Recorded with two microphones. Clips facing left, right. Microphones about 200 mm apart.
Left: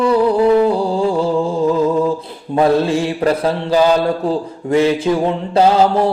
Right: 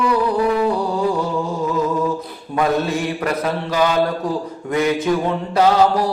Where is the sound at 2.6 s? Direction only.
30° left (ahead or behind).